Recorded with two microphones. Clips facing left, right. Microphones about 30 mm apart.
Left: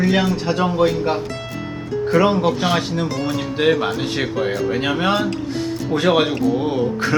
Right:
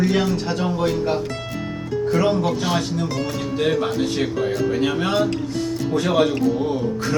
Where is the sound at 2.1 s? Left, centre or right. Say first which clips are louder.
Left 4 dB; left.